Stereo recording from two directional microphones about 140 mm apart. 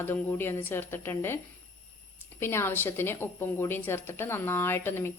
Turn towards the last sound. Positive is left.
turn(degrees=15)  # may be behind; listen again after turning